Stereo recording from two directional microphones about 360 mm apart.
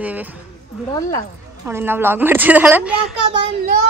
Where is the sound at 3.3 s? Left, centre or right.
Centre.